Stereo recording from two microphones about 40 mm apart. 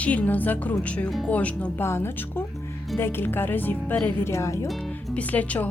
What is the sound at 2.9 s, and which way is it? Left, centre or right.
Speech, left.